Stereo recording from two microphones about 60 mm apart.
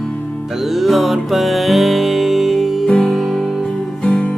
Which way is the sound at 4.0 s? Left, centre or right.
Centre.